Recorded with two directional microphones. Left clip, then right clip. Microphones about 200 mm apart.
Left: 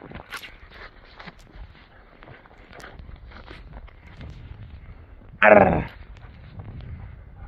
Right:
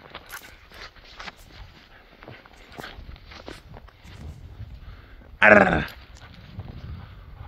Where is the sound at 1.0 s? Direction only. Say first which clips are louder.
Right 4 dB; 10° left (ahead or behind).